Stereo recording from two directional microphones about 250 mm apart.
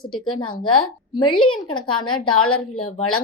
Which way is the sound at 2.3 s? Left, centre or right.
Left.